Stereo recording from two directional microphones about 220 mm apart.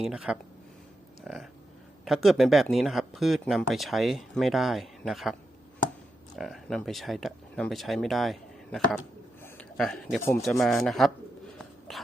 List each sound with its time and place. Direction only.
0.0 s speech: 5° right (ahead or behind)
1.2 s a sound: centre (ahead or behind)
2.0 s a man's voice: centre (ahead or behind)
10.8 s speech: centre (ahead or behind)
11.5 s bird: centre (ahead or behind)